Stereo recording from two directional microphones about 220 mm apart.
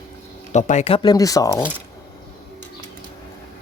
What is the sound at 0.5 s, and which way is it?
Speech, 30° left (ahead or behind).